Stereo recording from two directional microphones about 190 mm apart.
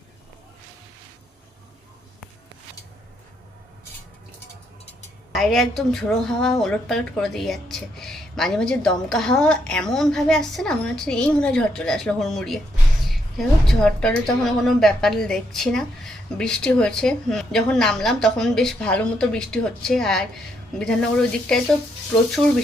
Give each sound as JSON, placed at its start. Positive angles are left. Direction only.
{"t": 5.3, "sound": "a woman's voice", "side_deg": 0}